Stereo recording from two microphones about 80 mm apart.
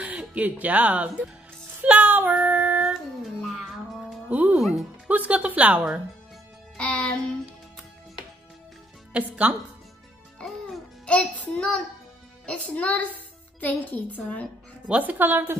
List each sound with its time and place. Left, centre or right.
0.0 s speech: centre
1.8 s child singing: centre
2.8 s music: centre
4.3 s speech: centre
4.6 s speech: centre
5.0 s a woman's voice: centre
6.8 s music: centre
9.1 s speech: centre
11.1 s music: centre
13.6 s a woman's voice: left
14.9 s speech: centre